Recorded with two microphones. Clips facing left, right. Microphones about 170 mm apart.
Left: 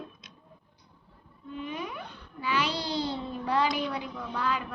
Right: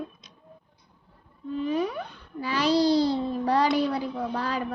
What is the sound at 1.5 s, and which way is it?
Whale vocalization, 35° right (ahead or behind).